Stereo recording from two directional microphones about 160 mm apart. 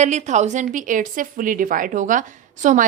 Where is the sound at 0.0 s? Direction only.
45° right (ahead or behind).